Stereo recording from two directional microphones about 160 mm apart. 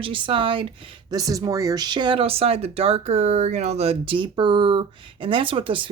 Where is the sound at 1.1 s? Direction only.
20° right (ahead or behind).